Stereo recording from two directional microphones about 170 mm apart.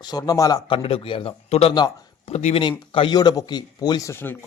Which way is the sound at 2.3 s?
35° left (ahead or behind).